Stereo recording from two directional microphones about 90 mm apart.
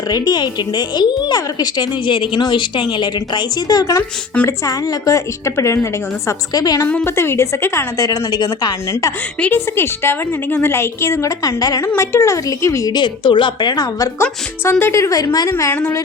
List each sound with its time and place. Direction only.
0.1 s a woman's voice: 50° left (ahead or behind)
2.1 s a woman's voice: 65° left (ahead or behind); by 6.3 s 30° left (ahead or behind)
6.5 s a woman's voice: 45° left (ahead or behind)
6.8 s a woman's voice: 25° left (ahead or behind)
8.0 s a woman's voice: 45° left (ahead or behind)
8.9 s a woman's voice: 40° left (ahead or behind)
9.4 s a woman's voice: 25° left (ahead or behind)
12.9 s a woman's voice: 60° left (ahead or behind)
14.2 s a woman's voice: 25° left (ahead or behind)
15.1 s a woman's voice: 45° left (ahead or behind)